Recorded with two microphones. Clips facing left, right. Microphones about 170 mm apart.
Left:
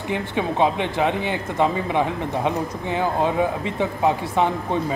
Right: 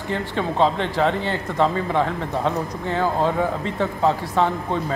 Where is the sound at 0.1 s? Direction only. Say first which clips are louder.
Even; 15° left (ahead or behind).